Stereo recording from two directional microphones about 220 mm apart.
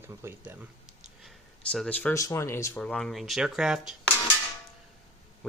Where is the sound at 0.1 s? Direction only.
10° right (ahead or behind).